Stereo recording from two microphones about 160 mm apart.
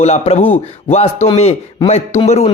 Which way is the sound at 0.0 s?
40° left (ahead or behind).